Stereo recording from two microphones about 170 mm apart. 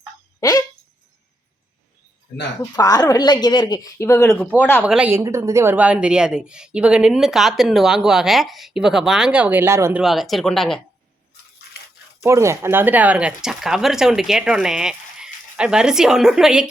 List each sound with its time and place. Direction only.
0.3 s speech: 20° left (ahead or behind)
2.7 s speech: 20° left (ahead or behind)
4.8 s speech: 5° right (ahead or behind)
10.0 s speech: centre (ahead or behind)
12.2 s speech: 15° right (ahead or behind)